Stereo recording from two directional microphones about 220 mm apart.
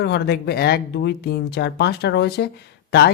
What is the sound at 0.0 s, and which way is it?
Speech, 50° left (ahead or behind).